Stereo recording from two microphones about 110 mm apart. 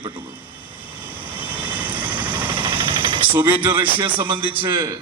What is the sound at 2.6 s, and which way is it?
Vehicle, 50° right (ahead or behind).